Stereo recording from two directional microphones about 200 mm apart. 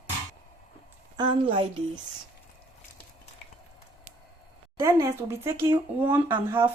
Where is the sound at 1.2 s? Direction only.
25° right (ahead or behind).